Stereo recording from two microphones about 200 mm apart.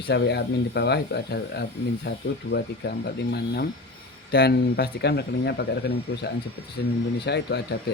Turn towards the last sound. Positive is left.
turn(degrees=55)  # may be behind; listen again after turning